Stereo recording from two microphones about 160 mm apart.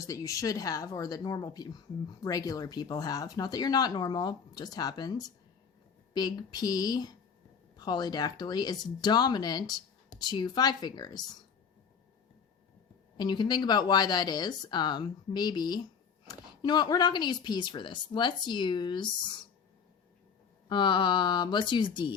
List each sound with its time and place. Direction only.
0.0 s speech: 20° left (ahead or behind)
13.1 s speech: 25° left (ahead or behind)
20.7 s speech: 30° left (ahead or behind)